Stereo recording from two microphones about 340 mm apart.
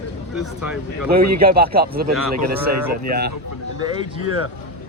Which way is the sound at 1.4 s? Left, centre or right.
Right.